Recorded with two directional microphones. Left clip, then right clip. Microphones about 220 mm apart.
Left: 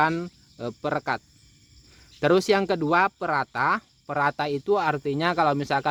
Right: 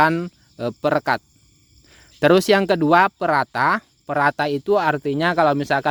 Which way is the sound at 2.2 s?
40° right (ahead or behind).